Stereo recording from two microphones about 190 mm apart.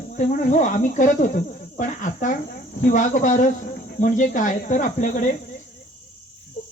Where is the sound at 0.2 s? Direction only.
40° left (ahead or behind).